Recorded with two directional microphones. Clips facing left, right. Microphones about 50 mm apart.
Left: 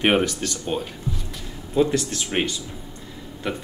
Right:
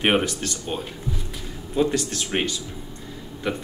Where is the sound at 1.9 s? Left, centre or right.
Centre.